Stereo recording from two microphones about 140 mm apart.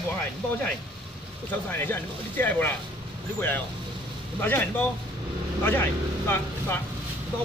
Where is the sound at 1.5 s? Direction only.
15° left (ahead or behind).